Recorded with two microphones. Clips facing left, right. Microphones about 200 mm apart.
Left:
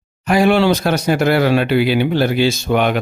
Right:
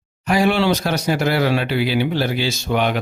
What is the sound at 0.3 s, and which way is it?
Speech, 55° left (ahead or behind).